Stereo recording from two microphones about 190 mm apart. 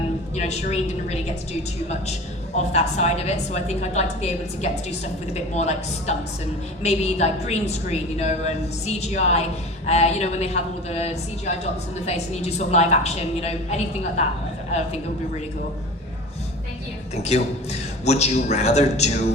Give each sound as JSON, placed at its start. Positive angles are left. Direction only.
{"t": 0.3, "sound": "a woman's voice", "side_deg": 35}
{"t": 2.6, "sound": "a woman's voice", "side_deg": 35}
{"t": 17.2, "sound": "a woman's voice", "side_deg": 35}